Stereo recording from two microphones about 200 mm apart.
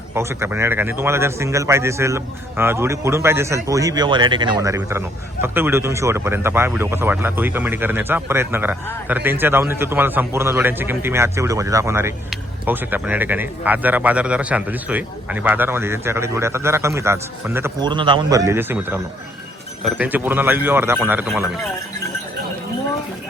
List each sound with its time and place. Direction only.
0.1 s speech: 15° right (ahead or behind)
17.8 s speech: 25° right (ahead or behind)